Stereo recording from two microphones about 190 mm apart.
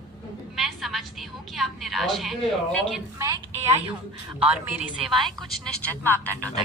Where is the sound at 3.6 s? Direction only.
35° right (ahead or behind).